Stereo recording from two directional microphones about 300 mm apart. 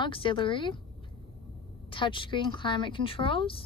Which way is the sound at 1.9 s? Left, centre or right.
Centre.